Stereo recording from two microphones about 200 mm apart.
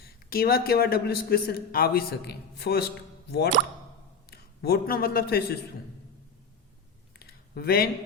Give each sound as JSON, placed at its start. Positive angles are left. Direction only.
{"t": 0.3, "sound": "a man's voice", "side_deg": 50}
{"t": 4.3, "sound": "a man's voice", "side_deg": 50}
{"t": 7.2, "sound": "a sound", "side_deg": 50}